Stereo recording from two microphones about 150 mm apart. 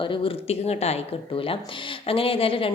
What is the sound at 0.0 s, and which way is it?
Speech, 35° left (ahead or behind).